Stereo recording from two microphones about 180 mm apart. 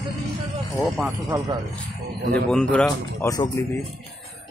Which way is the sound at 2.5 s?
5° left (ahead or behind).